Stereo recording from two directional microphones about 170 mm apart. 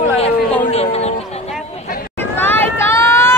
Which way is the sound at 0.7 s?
35° left (ahead or behind).